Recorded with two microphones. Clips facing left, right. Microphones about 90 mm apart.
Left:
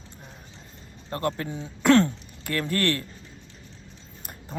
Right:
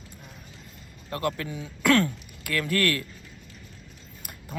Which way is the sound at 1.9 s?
30° left (ahead or behind).